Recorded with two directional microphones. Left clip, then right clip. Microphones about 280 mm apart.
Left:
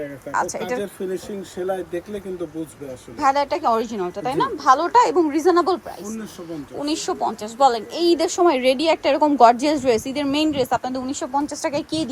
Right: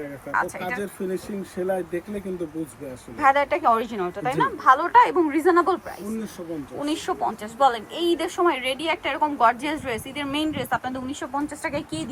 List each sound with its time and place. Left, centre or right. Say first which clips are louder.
0.3 s speech: left 1 dB; centre
1.6 s speech: left 1 dB; centre
3.2 s a woman's voice: even; centre